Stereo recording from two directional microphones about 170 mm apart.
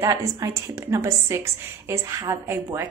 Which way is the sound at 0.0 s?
20° right (ahead or behind).